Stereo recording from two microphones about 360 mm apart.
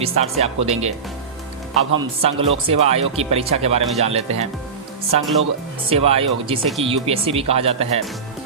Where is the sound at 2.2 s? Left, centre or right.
Centre.